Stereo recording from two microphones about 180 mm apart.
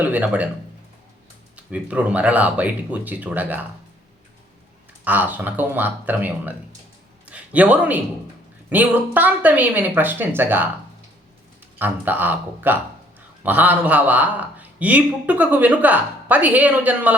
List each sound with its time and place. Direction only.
0.0 s speech: 10° right (ahead or behind)
1.5 s a man's voice: 5° right (ahead or behind)
5.0 s a man's voice: 10° right (ahead or behind)
11.8 s a man's voice: 10° right (ahead or behind)